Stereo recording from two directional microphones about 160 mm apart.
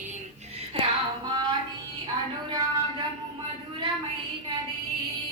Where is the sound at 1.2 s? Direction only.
25° right (ahead or behind).